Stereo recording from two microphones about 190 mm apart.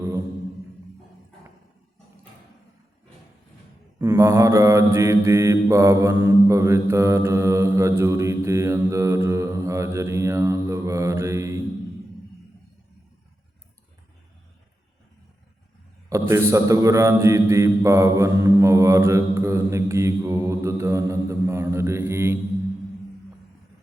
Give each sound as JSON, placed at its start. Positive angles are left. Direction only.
{"t": 3.9, "sound": "mantra", "side_deg": -15}
{"t": 16.0, "sound": "mantra", "side_deg": -15}